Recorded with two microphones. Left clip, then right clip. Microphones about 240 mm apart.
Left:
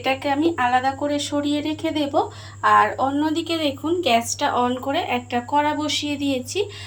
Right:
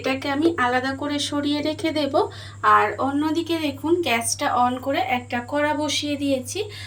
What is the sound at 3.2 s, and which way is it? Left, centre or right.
Speech, left.